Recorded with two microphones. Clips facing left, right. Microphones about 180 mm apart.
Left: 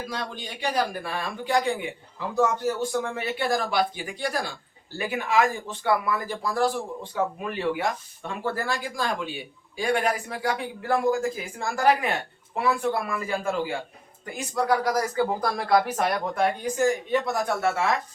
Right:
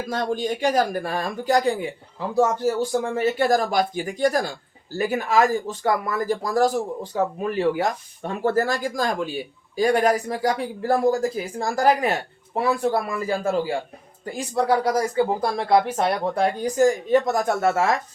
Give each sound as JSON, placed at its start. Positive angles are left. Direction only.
{"t": 0.1, "sound": "speech", "side_deg": -45}
{"t": 3.0, "sound": "speech", "side_deg": -40}